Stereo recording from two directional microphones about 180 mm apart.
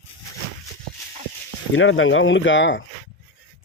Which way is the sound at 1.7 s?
90° left.